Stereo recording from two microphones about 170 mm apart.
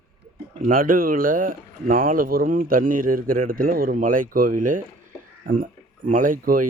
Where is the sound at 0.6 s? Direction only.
55° right (ahead or behind).